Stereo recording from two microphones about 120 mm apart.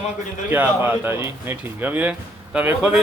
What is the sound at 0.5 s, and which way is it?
Speech, 15° right (ahead or behind).